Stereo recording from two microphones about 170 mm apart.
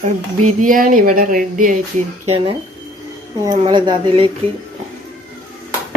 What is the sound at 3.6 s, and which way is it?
Speech, 25° right (ahead or behind).